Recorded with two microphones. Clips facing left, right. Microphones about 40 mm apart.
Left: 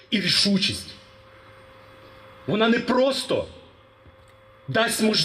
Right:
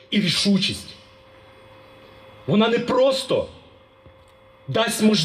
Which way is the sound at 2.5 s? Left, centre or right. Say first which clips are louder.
Right 2 dB; right.